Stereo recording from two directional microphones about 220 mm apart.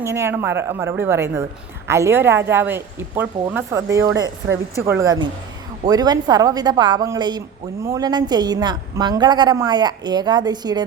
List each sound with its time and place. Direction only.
0.0 s a woman's voice: 10° right (ahead or behind)